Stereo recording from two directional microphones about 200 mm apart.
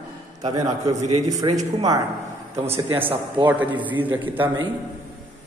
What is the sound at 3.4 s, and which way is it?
Speech, 10° right (ahead or behind).